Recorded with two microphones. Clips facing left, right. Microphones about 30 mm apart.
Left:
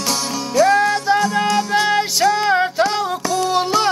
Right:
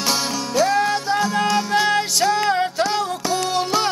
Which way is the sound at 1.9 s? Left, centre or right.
Centre.